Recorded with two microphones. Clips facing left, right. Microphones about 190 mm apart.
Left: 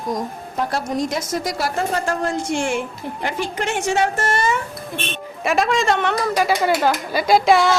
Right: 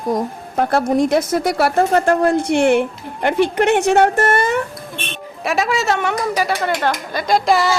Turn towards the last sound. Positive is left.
turn(degrees=0)  # may be behind; listen again after turning